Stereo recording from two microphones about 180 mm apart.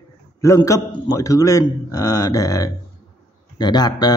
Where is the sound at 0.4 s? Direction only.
15° left (ahead or behind).